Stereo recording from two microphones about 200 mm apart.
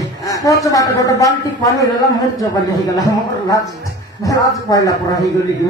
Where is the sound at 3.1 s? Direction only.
15° left (ahead or behind).